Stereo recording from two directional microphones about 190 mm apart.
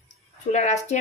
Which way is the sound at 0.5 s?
40° left (ahead or behind).